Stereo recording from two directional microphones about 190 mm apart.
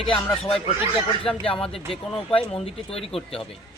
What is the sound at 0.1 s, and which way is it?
Speech, 30° left (ahead or behind).